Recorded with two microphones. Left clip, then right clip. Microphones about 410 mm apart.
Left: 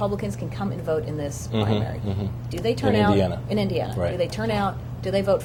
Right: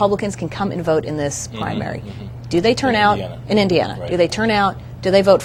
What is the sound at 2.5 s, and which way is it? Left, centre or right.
Speech, right.